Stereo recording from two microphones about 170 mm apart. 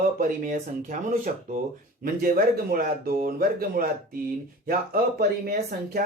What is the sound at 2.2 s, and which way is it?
Speech, 60° right (ahead or behind).